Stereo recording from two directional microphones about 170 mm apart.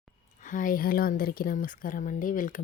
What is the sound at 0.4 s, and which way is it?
Speech, 50° left (ahead or behind).